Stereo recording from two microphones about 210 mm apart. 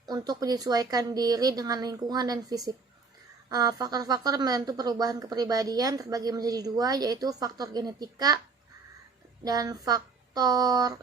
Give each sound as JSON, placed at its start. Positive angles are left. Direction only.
{"t": 0.0, "sound": "speech", "side_deg": -20}
{"t": 9.4, "sound": "speech", "side_deg": -20}